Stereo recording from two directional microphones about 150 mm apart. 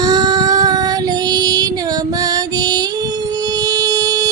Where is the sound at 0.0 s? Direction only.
25° right (ahead or behind).